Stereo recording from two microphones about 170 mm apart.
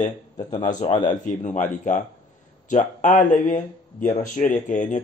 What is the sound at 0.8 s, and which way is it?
Speech, 25° left (ahead or behind).